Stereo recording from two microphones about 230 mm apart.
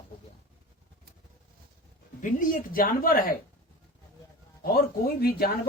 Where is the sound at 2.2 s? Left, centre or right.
Left.